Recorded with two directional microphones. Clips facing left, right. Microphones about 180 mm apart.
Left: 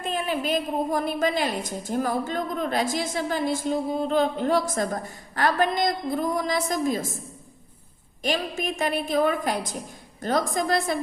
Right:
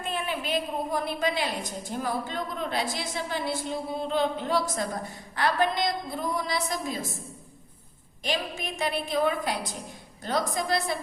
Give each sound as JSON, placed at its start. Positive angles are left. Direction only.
{"t": 0.0, "sound": "a woman's voice", "side_deg": 40}
{"t": 8.2, "sound": "a woman's voice", "side_deg": 50}